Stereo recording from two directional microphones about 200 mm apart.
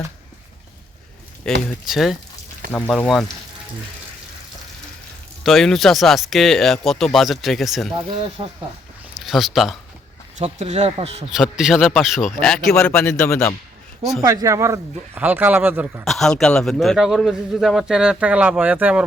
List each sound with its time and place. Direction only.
1.5 s a man's voice: 5° left (ahead or behind)
5.4 s a man's voice: centre (ahead or behind)
8.1 s speech: 30° right (ahead or behind)
9.2 s a man's voice: centre (ahead or behind)
10.3 s speech: 35° right (ahead or behind)
11.3 s a man's voice: centre (ahead or behind)
14.2 s speech: 15° right (ahead or behind)
16.0 s a man's voice: centre (ahead or behind)